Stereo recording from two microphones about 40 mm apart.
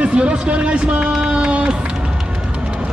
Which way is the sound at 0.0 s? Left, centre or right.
Right.